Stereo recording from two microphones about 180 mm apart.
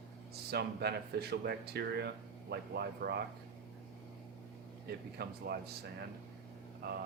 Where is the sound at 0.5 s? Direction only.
65° right (ahead or behind).